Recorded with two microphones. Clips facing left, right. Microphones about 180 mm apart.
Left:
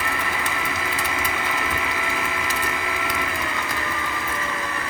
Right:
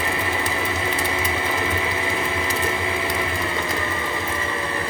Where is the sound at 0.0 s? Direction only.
25° right (ahead or behind).